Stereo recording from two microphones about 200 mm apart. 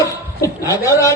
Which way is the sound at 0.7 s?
15° left (ahead or behind).